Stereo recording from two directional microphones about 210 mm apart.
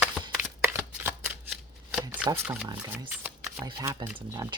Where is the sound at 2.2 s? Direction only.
15° right (ahead or behind).